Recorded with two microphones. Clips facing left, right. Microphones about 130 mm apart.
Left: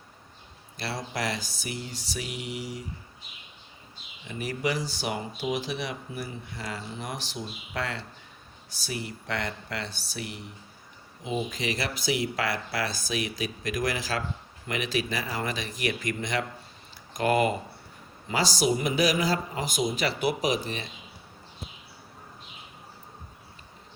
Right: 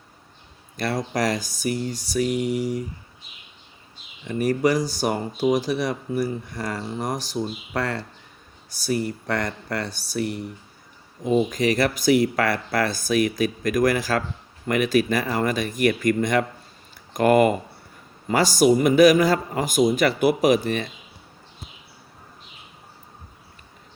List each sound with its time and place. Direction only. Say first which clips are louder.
0.8 s speech: right 8 dB; 50° right (ahead or behind)
4.3 s speech: right 9 dB; 45° right (ahead or behind)